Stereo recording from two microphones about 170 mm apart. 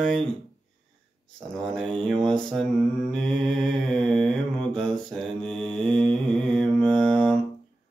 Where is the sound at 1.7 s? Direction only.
5° left (ahead or behind).